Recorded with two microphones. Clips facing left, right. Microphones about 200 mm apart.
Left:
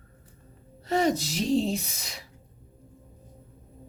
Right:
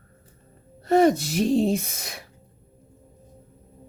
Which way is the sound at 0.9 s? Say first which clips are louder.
Right 7 dB; 55° right (ahead or behind).